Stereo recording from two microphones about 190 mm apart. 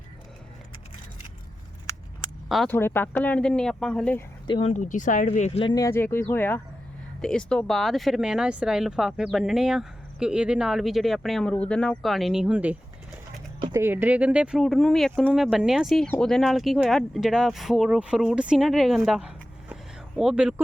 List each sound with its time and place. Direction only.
2.5 s speech: centre (ahead or behind)
2.7 s speech: 10° left (ahead or behind)
4.4 s speech: 25° left (ahead or behind)
4.7 s speech: 40° left (ahead or behind); by 12.7 s 5° right (ahead or behind)
13.7 s speech: 10° right (ahead or behind)